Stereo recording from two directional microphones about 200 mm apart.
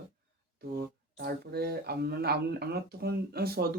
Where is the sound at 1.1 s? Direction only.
50° right (ahead or behind).